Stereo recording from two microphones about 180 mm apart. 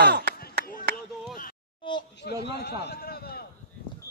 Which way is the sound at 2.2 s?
65° left (ahead or behind).